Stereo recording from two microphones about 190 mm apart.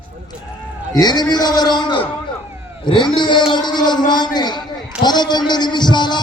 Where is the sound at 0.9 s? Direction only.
20° left (ahead or behind).